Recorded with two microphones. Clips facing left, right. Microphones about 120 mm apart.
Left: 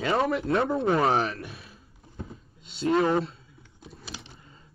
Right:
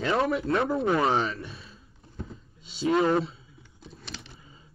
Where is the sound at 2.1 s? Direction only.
5° left (ahead or behind).